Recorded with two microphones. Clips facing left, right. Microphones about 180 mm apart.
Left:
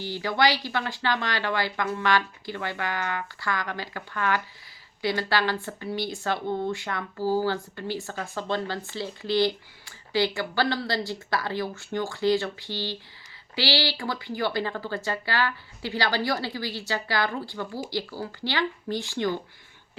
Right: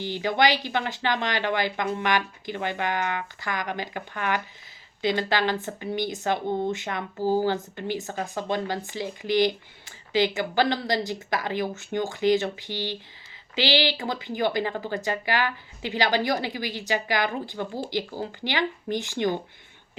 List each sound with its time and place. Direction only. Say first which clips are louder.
0.0 s speech: right 1 dB; 20° right (ahead or behind)